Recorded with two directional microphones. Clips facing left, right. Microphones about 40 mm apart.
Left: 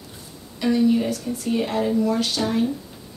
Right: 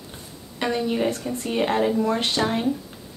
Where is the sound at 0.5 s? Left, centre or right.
Right.